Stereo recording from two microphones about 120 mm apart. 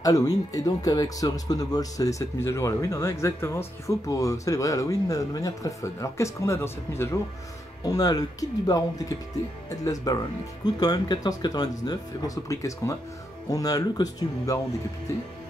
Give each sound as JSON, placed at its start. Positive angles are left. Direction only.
{"t": 0.0, "sound": "speech", "side_deg": 30}
{"t": 7.8, "sound": "speech", "side_deg": 30}